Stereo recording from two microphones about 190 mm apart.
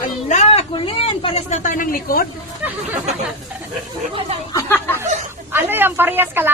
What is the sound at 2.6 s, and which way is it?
Speech, 5° right (ahead or behind).